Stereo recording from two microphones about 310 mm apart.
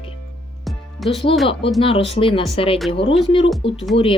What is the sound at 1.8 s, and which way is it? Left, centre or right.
Speech, centre.